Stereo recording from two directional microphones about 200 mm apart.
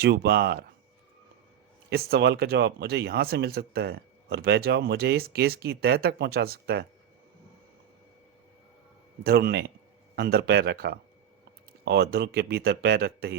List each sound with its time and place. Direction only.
0.0 s speech: 50° right (ahead or behind)
1.9 s speech: 55° right (ahead or behind)
9.2 s speech: 50° right (ahead or behind)